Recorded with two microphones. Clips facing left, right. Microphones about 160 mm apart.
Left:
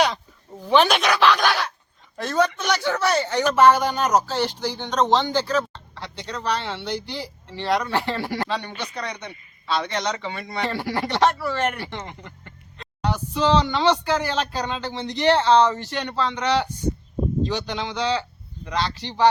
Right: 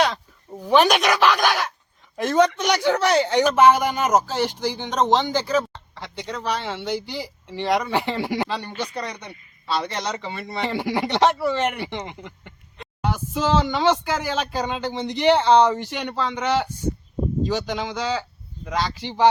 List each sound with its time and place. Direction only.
0.6 s speech: 10° right (ahead or behind)
8.9 s speech: 35° right (ahead or behind)
9.7 s speech: 5° right (ahead or behind)
10.7 s speech: 15° right (ahead or behind)